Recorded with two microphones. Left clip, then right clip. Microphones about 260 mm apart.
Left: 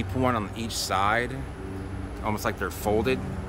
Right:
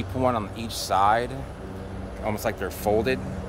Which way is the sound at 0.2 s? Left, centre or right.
Centre.